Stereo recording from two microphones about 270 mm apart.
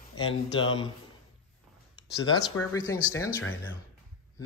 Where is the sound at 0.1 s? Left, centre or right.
Centre.